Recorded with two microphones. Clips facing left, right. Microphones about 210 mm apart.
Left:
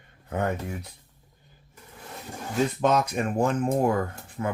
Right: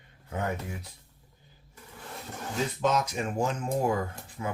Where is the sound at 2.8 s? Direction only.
60° left (ahead or behind).